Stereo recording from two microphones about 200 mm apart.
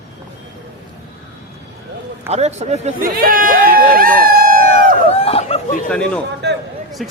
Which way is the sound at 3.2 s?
45° right (ahead or behind).